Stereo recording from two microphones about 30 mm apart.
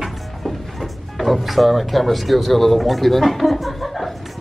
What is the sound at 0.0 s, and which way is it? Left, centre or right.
Speech, centre.